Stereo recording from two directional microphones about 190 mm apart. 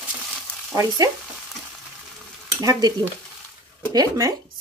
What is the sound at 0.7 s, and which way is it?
Speech, 20° right (ahead or behind).